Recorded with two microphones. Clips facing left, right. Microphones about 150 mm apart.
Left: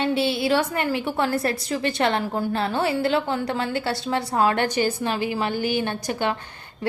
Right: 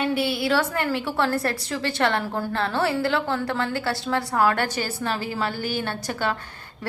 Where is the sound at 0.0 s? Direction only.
25° left (ahead or behind).